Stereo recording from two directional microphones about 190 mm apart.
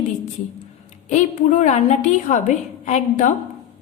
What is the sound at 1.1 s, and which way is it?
A woman's voice, 40° left (ahead or behind).